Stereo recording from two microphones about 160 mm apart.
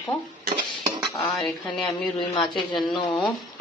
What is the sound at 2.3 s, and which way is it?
Speech, 30° left (ahead or behind).